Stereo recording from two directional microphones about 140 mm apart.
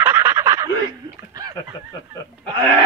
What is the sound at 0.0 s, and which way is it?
Honk, 15° right (ahead or behind).